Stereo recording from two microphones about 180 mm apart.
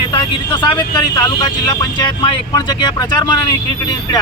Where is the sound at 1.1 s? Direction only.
20° left (ahead or behind).